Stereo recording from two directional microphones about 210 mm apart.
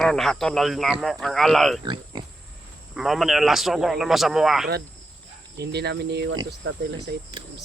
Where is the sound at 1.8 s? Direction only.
20° right (ahead or behind).